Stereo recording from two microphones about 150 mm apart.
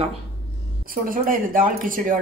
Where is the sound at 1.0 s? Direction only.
70° right (ahead or behind).